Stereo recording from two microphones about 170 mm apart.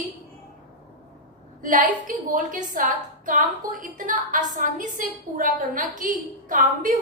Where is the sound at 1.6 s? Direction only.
50° right (ahead or behind).